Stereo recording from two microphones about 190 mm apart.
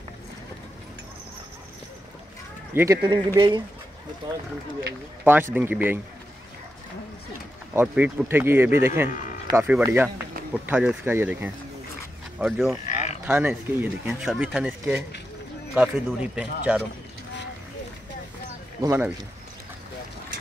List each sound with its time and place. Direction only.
2.7 s speech: 15° right (ahead or behind)
5.2 s speech: 10° right (ahead or behind)
7.7 s speech: 5° right (ahead or behind)
12.8 s livestock: 35° left (ahead or behind)
13.2 s speech: 10° right (ahead or behind)
18.8 s speech: 10° right (ahead or behind)